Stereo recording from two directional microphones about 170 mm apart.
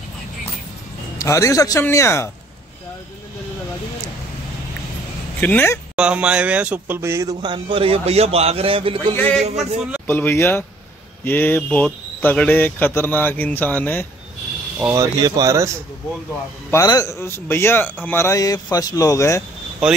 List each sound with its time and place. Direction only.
1.1 s speech: 20° left (ahead or behind)
5.4 s speech: 10° left (ahead or behind)
5.9 s speech: 5° right (ahead or behind); by 9.0 s 30° right (ahead or behind)
9.1 s speech: 10° left (ahead or behind)
9.6 s a man's voice: 5° right (ahead or behind)
10.0 s speech: 10° left (ahead or behind)
14.8 s a man's voice: 15° right (ahead or behind)
16.7 s speech: 20° left (ahead or behind)